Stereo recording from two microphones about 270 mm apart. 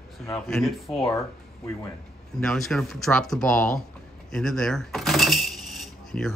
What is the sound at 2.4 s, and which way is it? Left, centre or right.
Speech, centre.